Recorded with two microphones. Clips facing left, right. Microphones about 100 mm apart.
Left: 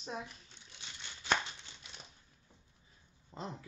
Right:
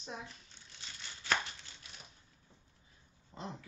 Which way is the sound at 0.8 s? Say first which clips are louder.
Even; 20° left (ahead or behind).